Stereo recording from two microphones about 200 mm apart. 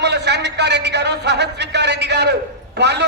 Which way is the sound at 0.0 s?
60° right (ahead or behind).